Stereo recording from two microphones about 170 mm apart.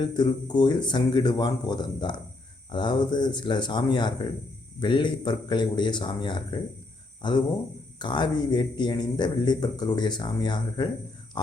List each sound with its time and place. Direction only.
0.0 s speech: 25° left (ahead or behind)